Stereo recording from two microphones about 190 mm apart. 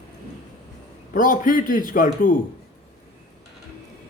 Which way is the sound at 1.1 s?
45° left (ahead or behind).